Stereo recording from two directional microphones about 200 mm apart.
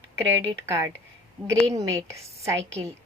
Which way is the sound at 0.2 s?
15° right (ahead or behind).